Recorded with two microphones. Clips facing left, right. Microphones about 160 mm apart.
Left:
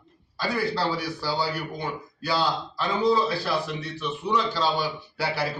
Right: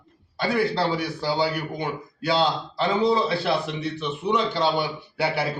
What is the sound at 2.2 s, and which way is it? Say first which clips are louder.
Speech: right 3 dB; 25° right (ahead or behind).